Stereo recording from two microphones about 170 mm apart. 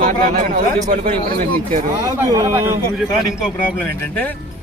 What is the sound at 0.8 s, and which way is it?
Speech, 40° right (ahead or behind).